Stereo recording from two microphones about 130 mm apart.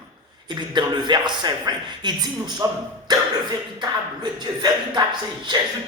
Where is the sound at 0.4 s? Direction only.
35° right (ahead or behind).